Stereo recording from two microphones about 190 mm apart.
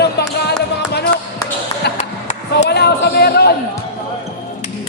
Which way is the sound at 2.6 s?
60° left (ahead or behind).